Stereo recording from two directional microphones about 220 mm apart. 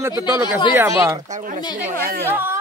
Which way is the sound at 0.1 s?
20° left (ahead or behind).